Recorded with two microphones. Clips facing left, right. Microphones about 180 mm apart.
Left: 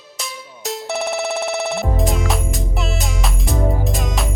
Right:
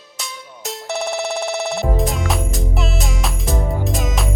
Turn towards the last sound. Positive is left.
turn(degrees=0)  # may be behind; listen again after turning